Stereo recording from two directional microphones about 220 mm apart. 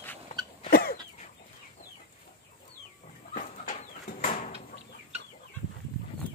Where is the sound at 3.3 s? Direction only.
40° left (ahead or behind).